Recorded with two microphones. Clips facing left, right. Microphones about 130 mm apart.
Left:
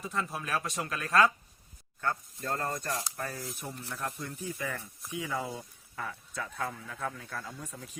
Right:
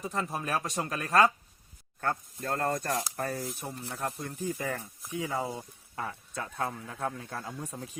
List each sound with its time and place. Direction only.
0.0 s speech: 40° right (ahead or behind)
2.0 s speech: 50° right (ahead or behind)
3.3 s speech: 20° right (ahead or behind)
3.9 s speech: 40° right (ahead or behind)
5.3 s speech: 25° right (ahead or behind)